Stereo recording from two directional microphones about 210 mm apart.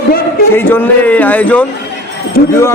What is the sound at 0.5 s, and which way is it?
A man's voice, 10° left (ahead or behind).